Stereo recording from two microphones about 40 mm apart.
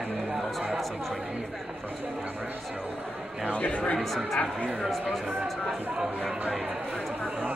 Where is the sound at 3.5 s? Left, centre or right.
Left.